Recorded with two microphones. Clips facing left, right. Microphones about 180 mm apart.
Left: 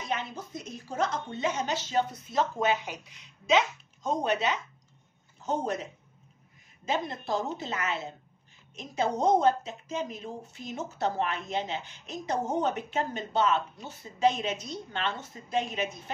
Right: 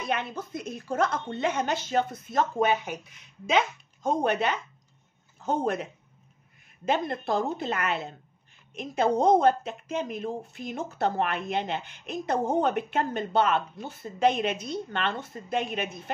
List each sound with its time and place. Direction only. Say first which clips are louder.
0.0 s a woman's voice: right 3 dB; 60° right (ahead or behind)
6.9 s a woman's voice: right 4 dB; 55° right (ahead or behind)